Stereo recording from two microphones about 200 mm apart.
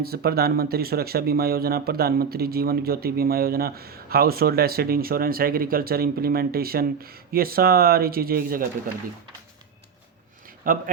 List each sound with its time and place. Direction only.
0.0 s speech: 50° right (ahead or behind)
10.7 s speech: 45° right (ahead or behind)